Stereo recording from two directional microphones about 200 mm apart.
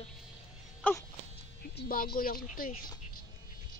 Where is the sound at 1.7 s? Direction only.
45° left (ahead or behind).